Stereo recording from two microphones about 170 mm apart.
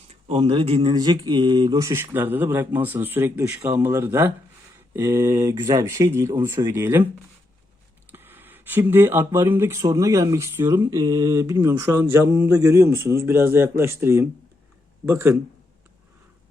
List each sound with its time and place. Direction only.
0.3 s speech: 35° right (ahead or behind); by 7.0 s 15° right (ahead or behind)
8.1 s speech: 10° right (ahead or behind)